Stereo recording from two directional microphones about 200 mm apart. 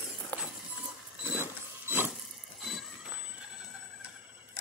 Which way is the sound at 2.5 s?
Centre (ahead or behind).